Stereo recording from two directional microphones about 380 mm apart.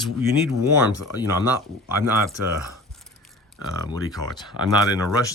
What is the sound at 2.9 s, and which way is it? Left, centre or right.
Biting, centre.